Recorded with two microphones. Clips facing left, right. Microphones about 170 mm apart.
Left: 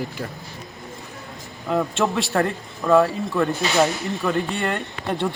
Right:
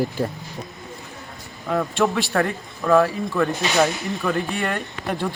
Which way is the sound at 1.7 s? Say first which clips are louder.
Right 1 dB; centre (ahead or behind).